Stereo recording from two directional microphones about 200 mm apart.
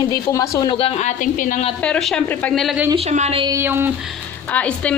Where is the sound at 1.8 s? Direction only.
5° left (ahead or behind).